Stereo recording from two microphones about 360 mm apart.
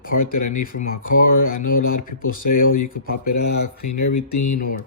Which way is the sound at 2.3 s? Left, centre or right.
Left.